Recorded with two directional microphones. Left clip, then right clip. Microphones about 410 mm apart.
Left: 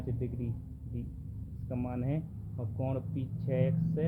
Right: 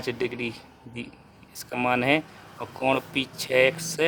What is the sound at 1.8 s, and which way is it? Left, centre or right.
Speech, right.